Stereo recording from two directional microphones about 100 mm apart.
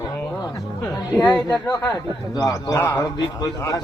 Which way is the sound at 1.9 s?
40° left (ahead or behind).